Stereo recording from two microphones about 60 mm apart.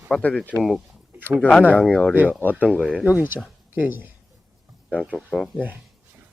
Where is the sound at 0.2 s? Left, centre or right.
Left.